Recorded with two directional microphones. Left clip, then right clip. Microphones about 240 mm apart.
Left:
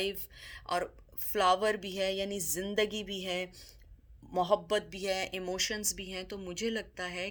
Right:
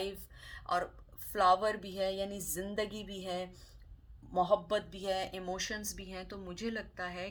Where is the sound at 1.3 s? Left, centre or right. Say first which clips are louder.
Left 1 dB; left.